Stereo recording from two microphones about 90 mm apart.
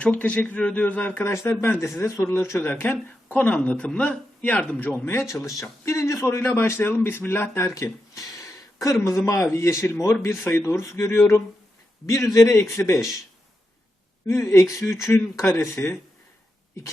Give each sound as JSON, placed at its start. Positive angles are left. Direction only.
{"t": 0.0, "sound": "speech", "side_deg": 15}
{"t": 5.3, "sound": "a man's voice", "side_deg": 35}
{"t": 14.3, "sound": "speech", "side_deg": 30}